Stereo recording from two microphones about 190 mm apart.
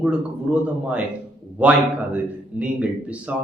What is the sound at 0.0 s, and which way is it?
Speech, 5° right (ahead or behind).